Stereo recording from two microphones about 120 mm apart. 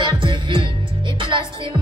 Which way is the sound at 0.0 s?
45° right (ahead or behind).